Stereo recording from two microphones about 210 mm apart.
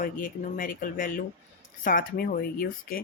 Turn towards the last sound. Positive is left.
turn(degrees=45)  # may be behind; listen again after turning